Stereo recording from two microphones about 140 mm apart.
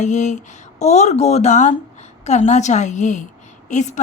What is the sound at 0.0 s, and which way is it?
A woman's voice, 60° left (ahead or behind).